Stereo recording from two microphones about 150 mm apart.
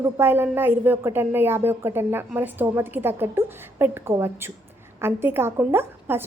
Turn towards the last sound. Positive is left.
turn(degrees=-15)  # may be behind; listen again after turning